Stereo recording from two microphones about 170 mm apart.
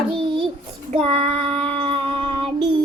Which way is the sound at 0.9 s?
35° right (ahead or behind).